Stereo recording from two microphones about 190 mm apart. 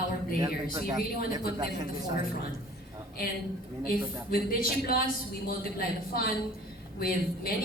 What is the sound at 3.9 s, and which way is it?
Speech, 50° left (ahead or behind).